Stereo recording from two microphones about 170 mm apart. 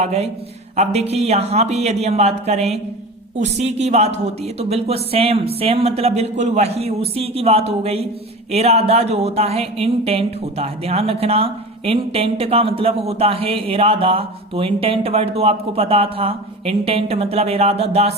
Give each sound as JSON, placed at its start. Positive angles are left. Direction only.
{"t": 0.0, "sound": "speech", "side_deg": -40}